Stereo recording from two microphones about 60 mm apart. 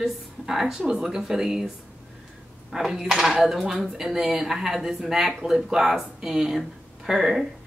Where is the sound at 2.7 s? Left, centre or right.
Centre.